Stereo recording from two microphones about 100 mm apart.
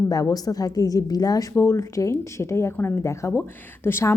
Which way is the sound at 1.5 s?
25° left (ahead or behind).